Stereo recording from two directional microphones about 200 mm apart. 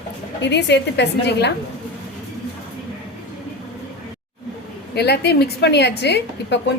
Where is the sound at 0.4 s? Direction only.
60° left (ahead or behind).